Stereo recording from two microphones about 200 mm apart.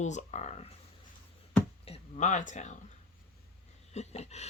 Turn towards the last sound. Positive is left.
turn(degrees=35)  # may be behind; listen again after turning